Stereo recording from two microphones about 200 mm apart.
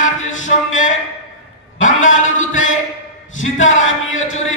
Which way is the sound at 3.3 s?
75° left (ahead or behind).